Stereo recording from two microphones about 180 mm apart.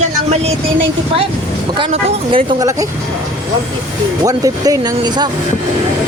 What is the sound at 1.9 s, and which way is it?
Speech, 35° right (ahead or behind).